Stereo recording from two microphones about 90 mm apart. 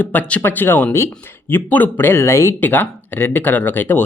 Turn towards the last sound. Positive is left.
turn(degrees=25)  # may be behind; listen again after turning